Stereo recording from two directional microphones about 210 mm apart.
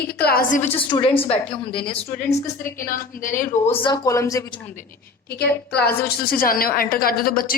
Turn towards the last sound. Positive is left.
turn(degrees=45)  # may be behind; listen again after turning